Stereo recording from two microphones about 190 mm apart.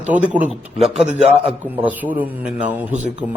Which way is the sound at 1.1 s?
35° right (ahead or behind).